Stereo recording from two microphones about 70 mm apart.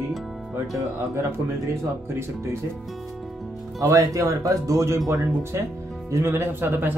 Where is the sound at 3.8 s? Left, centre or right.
Right.